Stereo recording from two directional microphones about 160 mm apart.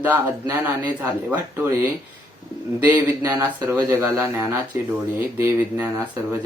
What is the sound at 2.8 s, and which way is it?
Speech, 10° right (ahead or behind).